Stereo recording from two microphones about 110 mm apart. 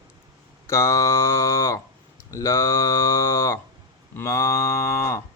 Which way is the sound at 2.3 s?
25° left (ahead or behind).